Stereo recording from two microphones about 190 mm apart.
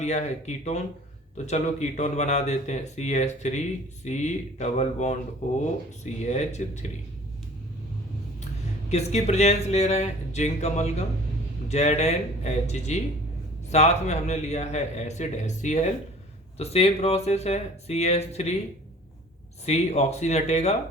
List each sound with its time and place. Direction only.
0.0 s a man's voice: 35° left (ahead or behind)
8.9 s a man's voice: 35° left (ahead or behind)
19.6 s a man's voice: 35° left (ahead or behind)